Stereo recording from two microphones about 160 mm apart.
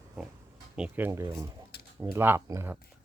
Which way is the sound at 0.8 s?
10° right (ahead or behind).